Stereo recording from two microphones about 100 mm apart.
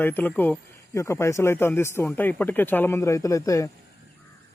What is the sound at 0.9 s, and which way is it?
Speech, 30° left (ahead or behind).